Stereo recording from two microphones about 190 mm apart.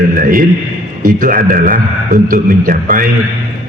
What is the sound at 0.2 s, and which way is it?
A man's voice, 45° right (ahead or behind).